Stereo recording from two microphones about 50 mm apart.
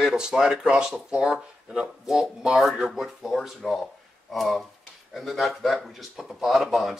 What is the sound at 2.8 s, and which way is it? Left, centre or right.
Speech, centre.